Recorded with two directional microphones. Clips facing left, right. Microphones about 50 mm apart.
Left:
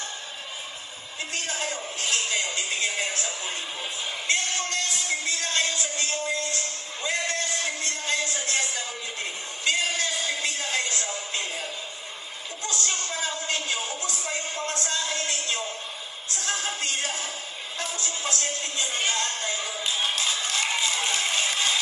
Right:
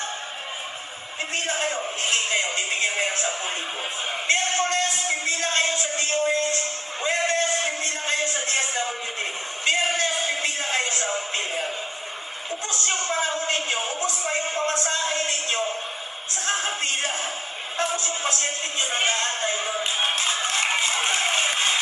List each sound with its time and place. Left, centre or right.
1.3 s music: right
12.6 s a sound: right
17.7 s music: right